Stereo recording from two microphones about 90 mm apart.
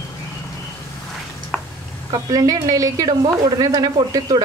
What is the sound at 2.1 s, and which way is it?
A woman's voice, 45° right (ahead or behind).